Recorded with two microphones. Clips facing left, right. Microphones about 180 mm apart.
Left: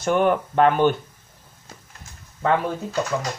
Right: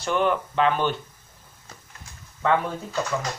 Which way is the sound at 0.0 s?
50° left (ahead or behind).